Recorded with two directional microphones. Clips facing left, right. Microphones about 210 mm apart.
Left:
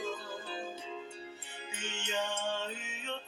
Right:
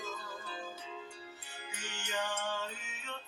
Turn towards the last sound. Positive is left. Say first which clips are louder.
# left 4 dB
turn(degrees=30)  # may be behind; listen again after turning